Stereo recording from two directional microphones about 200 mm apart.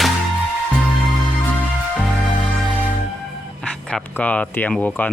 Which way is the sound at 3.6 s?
5° left (ahead or behind).